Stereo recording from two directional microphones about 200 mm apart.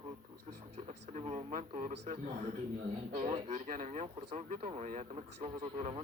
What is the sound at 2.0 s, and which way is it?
Speech, 35° right (ahead or behind).